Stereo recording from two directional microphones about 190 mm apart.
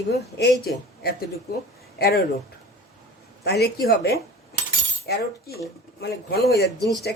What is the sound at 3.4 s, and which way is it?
Speech, 60° left (ahead or behind).